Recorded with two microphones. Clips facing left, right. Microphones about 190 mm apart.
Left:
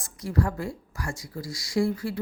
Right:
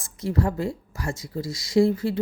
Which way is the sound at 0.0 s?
25° right (ahead or behind).